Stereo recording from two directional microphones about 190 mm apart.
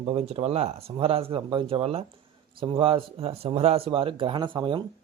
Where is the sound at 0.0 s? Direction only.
30° right (ahead or behind).